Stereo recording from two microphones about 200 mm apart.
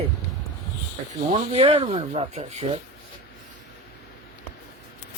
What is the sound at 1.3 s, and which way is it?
Speech, 30° right (ahead or behind).